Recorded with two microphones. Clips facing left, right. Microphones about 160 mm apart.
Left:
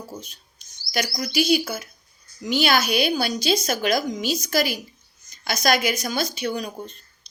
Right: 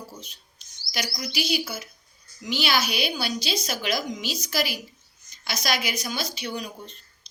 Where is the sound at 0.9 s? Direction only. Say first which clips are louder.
Left 5 dB; 45° left (ahead or behind).